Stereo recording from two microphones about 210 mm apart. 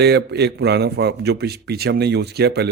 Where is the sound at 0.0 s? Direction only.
55° right (ahead or behind).